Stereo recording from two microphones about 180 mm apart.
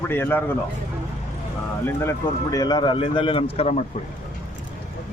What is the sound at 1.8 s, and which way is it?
Speech, 15° left (ahead or behind).